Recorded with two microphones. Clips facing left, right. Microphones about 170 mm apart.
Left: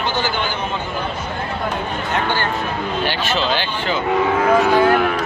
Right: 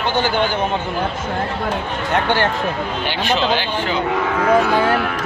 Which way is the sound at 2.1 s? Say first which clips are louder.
Right 4 dB; 75° right (ahead or behind).